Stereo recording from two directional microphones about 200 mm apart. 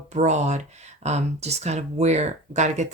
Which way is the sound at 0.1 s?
35° right (ahead or behind).